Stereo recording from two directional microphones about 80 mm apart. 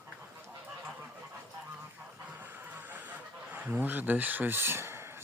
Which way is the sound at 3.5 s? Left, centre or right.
Right.